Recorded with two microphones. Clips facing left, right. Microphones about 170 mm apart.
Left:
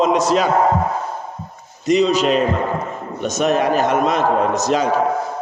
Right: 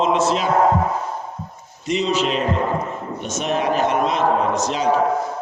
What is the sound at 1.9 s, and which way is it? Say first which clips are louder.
A man's voice: left 5 dB; 40° left (ahead or behind).